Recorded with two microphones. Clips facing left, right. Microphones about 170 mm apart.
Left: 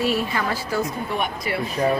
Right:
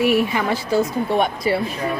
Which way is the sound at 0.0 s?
15° right (ahead or behind).